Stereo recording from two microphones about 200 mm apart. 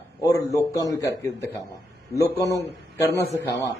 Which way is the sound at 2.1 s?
15° left (ahead or behind).